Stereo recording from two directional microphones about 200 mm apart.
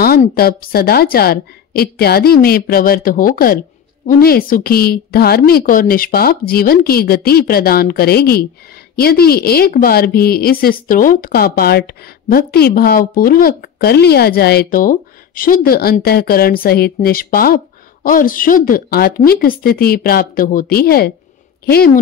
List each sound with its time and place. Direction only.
0.0 s a woman's voice: 50° left (ahead or behind)